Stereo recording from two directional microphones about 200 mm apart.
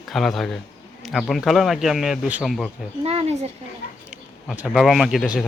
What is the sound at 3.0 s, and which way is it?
Speech, 30° right (ahead or behind).